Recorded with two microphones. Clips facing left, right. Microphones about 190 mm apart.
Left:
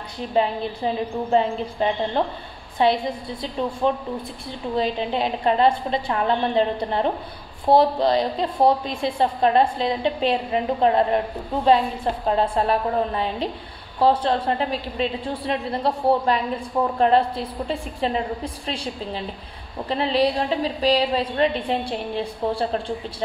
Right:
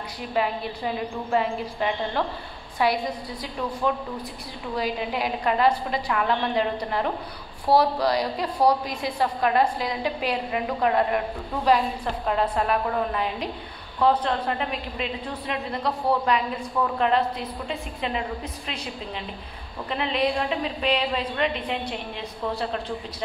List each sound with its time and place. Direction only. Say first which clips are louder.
0.3 s a woman's voice: left 4 dB; 30° left (ahead or behind)